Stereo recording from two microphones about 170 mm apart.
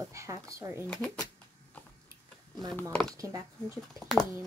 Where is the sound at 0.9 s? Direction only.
5° left (ahead or behind).